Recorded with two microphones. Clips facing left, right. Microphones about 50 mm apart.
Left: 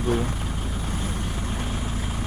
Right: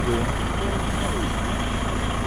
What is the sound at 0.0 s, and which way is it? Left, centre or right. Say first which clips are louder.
Speech: right 1 dB; right.